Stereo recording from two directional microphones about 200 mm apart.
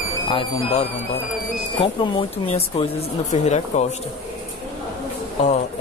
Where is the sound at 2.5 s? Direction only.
30° left (ahead or behind).